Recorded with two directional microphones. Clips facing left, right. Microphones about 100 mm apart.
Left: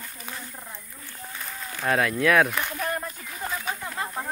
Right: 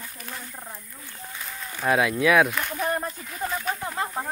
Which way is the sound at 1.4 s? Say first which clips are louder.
Even; centre (ahead or behind).